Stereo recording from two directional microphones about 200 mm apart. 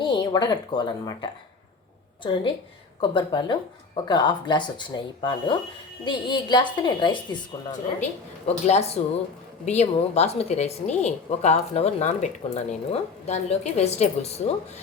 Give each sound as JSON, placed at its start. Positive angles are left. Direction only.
{"t": 0.0, "sound": "speech", "side_deg": 20}
{"t": 8.4, "sound": "a woman's voice", "side_deg": 30}